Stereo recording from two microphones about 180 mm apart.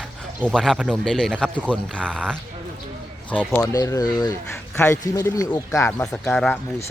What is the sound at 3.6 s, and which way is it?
Speech, 20° left (ahead or behind).